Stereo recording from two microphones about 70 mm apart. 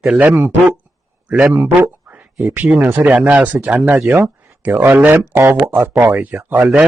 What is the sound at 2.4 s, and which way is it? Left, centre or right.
Speech, right.